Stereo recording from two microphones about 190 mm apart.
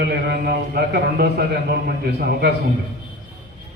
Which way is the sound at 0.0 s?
60° right (ahead or behind).